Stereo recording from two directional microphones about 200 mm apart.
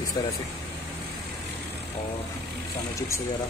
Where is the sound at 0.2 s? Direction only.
20° left (ahead or behind).